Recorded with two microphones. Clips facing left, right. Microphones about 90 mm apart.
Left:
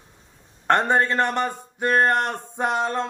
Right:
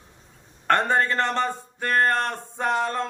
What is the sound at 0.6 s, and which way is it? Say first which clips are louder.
Speech: left 2 dB; 20° left (ahead or behind).